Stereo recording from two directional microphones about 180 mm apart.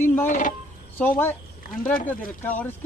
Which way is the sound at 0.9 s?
10° left (ahead or behind).